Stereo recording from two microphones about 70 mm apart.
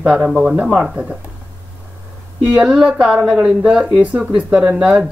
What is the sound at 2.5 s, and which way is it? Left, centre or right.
A woman's voice, centre.